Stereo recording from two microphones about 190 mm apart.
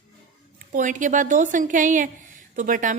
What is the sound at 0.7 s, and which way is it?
A woman's voice, 40° right (ahead or behind).